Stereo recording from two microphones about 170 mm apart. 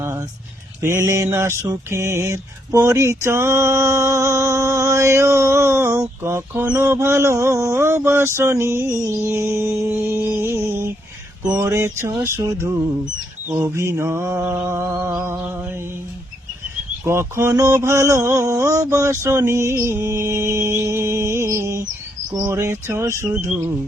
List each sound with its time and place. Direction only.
0.0 s a sound: 15° right (ahead or behind)
0.8 s mantra: 15° right (ahead or behind)
17.1 s mantra: 15° right (ahead or behind)